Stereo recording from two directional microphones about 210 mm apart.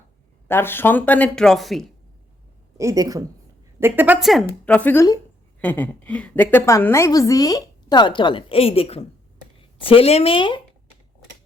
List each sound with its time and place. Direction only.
0.4 s speech: 10° left (ahead or behind)
2.7 s a woman's voice: 15° right (ahead or behind); by 10.6 s 25° left (ahead or behind)